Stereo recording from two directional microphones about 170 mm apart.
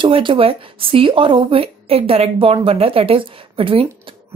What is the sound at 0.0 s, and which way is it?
Speech, 30° right (ahead or behind).